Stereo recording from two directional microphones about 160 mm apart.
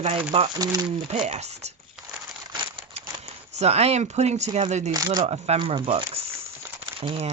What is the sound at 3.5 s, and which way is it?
Speech, 40° right (ahead or behind).